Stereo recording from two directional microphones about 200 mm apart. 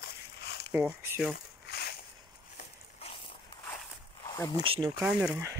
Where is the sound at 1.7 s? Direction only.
50° left (ahead or behind).